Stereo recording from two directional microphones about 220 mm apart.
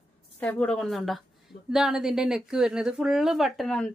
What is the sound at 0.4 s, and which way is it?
Speech, 5° left (ahead or behind).